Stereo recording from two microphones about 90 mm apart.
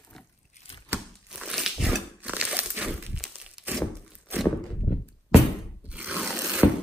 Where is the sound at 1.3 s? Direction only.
5° right (ahead or behind).